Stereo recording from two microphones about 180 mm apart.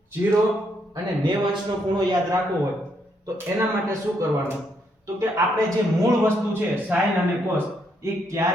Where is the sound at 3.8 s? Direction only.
15° right (ahead or behind).